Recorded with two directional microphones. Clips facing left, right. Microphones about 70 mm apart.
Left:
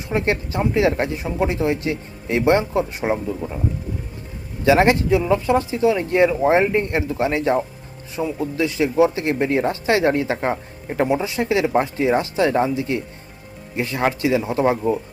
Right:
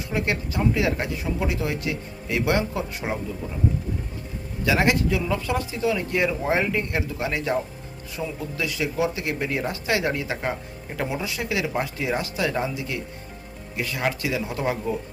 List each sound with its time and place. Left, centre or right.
0.1 s speech: left
4.6 s speech: left